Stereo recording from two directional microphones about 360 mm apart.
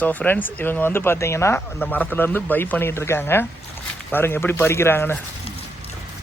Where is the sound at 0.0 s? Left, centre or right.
Centre.